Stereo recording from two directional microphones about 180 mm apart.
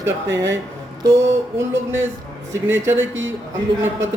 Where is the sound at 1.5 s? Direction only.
15° right (ahead or behind).